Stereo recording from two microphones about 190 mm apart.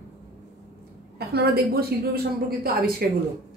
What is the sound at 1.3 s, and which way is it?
Speech, 55° right (ahead or behind).